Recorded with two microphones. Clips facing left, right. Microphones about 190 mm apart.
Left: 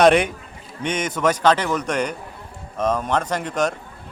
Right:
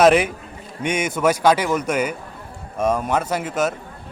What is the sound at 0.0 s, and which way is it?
A man's voice, 5° right (ahead or behind).